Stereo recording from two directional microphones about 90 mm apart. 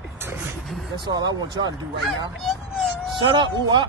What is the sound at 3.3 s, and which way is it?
Speech, 60° right (ahead or behind).